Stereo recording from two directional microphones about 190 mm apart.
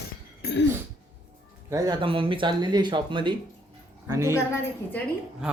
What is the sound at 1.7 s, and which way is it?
A woman's voice, 20° right (ahead or behind).